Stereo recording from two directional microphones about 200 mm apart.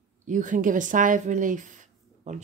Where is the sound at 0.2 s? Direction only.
40° right (ahead or behind).